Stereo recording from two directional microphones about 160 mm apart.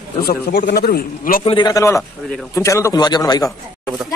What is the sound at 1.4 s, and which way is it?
Speech, 30° left (ahead or behind).